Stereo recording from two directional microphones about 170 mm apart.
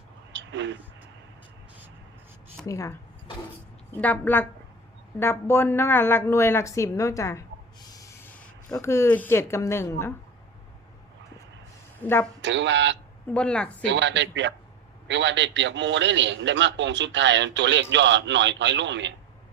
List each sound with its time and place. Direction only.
0.3 s a sound: 90° right
2.6 s a sound: 20° left (ahead or behind)
3.9 s speech: 10° left (ahead or behind)
8.0 s snort: 15° left (ahead or behind)
8.7 s speech: 15° left (ahead or behind)
12.0 s speech: 15° left (ahead or behind)
12.4 s a man's voice: 90° right
13.2 s speech: 5° left (ahead or behind)
13.8 s a man's voice: 90° right